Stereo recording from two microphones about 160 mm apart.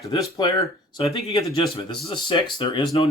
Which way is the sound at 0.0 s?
25° left (ahead or behind).